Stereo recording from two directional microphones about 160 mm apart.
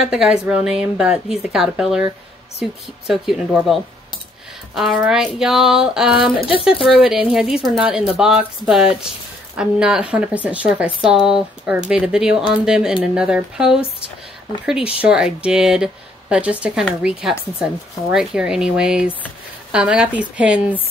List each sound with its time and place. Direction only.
0.1 s a woman's voice: 5° right (ahead or behind)
6.3 s speech: 35° left (ahead or behind)
6.8 s a woman's voice: 5° right (ahead or behind)
15.0 s a woman's voice: 5° right (ahead or behind)